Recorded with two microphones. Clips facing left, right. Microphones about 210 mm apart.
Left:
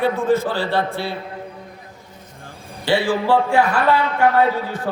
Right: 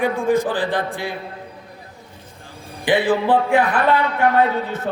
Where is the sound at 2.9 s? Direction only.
20° right (ahead or behind).